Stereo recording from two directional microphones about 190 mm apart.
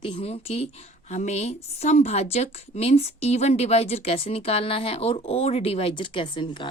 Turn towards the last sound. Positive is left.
turn(degrees=25)  # may be behind; listen again after turning